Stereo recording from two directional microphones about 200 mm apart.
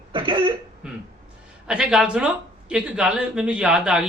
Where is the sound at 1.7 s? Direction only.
5° right (ahead or behind).